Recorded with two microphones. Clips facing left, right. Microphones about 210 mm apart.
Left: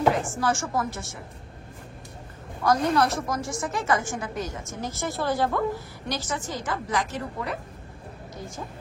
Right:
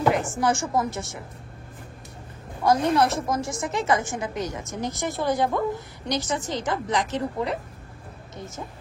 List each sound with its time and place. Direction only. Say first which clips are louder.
0.1 s speech: right 2 dB; 20° right (ahead or behind)
2.9 s speech: right 2 dB; 25° right (ahead or behind)